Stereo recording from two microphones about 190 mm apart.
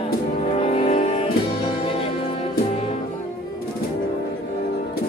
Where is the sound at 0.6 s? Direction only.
30° left (ahead or behind).